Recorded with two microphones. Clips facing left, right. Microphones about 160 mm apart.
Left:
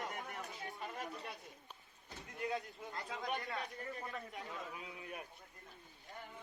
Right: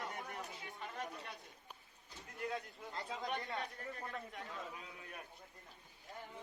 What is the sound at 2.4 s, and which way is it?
Speech, centre (ahead or behind).